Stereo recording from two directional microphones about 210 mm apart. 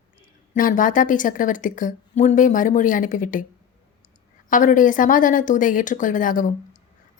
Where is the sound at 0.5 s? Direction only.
40° left (ahead or behind).